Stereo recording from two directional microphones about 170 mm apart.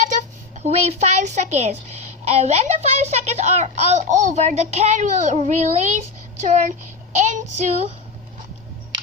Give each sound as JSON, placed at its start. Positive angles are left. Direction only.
{"t": 0.1, "sound": "a child's voice", "side_deg": -45}